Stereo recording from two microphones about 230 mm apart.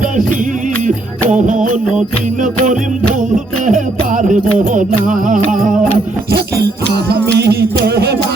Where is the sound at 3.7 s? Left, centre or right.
Right.